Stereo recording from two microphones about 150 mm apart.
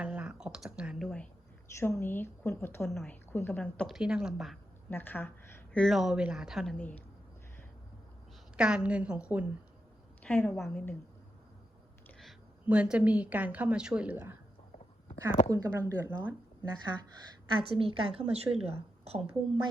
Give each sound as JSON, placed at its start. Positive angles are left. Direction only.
{"t": 0.0, "sound": "a sound", "side_deg": -10}
{"t": 1.7, "sound": "a woman's voice", "side_deg": 15}
{"t": 4.9, "sound": "a woman's voice", "side_deg": 15}
{"t": 5.8, "sound": "speech", "side_deg": 0}
{"t": 6.7, "sound": "a woman's voice", "side_deg": 10}
{"t": 8.5, "sound": "a woman's voice", "side_deg": -5}
{"t": 10.2, "sound": "a woman's voice", "side_deg": 10}
{"t": 12.6, "sound": "a woman's voice", "side_deg": -10}
{"t": 15.4, "sound": "a woman's voice", "side_deg": -20}
{"t": 17.6, "sound": "a woman's voice", "side_deg": -40}